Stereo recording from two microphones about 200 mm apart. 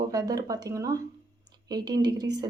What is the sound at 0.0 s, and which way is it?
Speech, 20° right (ahead or behind).